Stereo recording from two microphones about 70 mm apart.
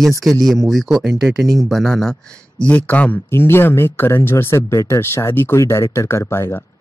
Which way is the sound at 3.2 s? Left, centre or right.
Left.